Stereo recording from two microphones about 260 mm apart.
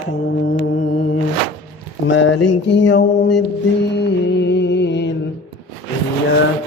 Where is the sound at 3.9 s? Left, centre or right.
Left.